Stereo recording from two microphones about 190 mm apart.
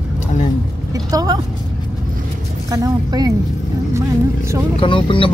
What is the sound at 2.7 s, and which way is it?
Speech, 20° right (ahead or behind).